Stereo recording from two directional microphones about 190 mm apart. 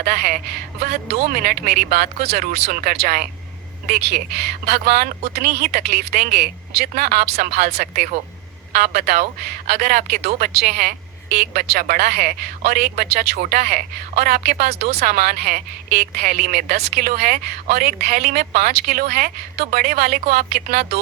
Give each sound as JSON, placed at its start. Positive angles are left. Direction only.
{"t": 0.8, "sound": "a woman's voice", "side_deg": -55}